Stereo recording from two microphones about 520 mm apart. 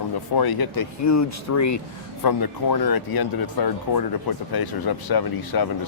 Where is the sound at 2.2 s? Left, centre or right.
Left.